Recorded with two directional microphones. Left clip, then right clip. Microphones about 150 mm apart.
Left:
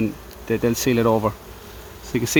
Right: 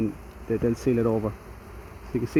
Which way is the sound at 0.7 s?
40° left (ahead or behind).